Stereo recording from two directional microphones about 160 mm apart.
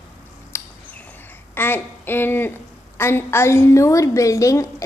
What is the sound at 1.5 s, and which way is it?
A woman's voice, 15° left (ahead or behind).